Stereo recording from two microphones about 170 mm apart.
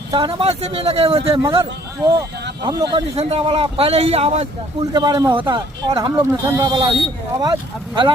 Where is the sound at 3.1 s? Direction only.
35° right (ahead or behind).